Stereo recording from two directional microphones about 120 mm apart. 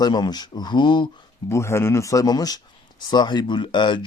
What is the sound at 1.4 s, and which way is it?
Speech, 20° left (ahead or behind).